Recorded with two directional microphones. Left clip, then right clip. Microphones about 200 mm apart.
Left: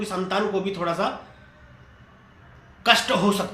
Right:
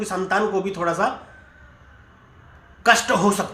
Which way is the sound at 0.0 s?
20° right (ahead or behind).